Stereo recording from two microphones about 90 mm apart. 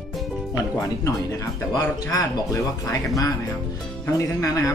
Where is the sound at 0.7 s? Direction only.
40° left (ahead or behind).